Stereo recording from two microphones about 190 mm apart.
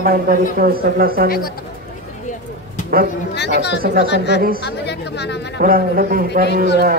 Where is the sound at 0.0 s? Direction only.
50° right (ahead or behind).